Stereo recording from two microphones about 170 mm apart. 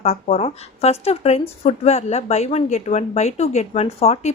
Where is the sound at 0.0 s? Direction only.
40° left (ahead or behind).